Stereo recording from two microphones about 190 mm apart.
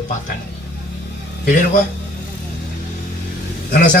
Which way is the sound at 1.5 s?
45° left (ahead or behind).